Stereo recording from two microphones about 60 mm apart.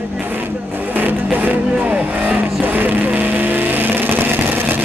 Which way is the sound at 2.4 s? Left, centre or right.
Right.